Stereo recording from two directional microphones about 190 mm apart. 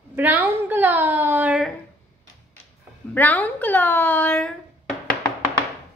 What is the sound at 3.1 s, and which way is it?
A woman's voice, 10° left (ahead or behind).